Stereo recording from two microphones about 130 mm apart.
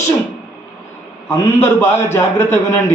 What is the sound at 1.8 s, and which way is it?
Speech, 20° left (ahead or behind).